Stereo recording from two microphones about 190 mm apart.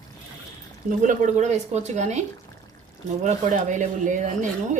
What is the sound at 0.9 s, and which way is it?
Speech, 40° right (ahead or behind).